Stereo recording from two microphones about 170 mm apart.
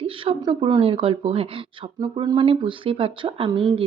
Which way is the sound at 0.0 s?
35° right (ahead or behind).